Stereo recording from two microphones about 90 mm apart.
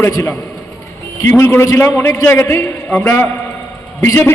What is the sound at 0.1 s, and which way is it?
A man's voice, 35° left (ahead or behind).